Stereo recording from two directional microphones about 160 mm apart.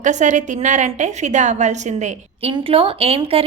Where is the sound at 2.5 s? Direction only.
35° right (ahead or behind).